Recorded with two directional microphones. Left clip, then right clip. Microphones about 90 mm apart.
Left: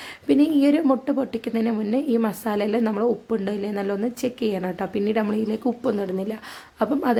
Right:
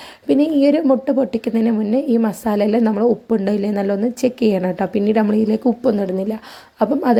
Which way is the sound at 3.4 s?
50° right (ahead or behind).